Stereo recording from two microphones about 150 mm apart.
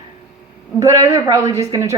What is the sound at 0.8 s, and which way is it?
Speech, 20° right (ahead or behind).